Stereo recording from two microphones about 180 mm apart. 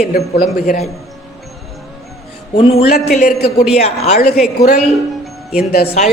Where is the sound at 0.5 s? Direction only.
55° left (ahead or behind).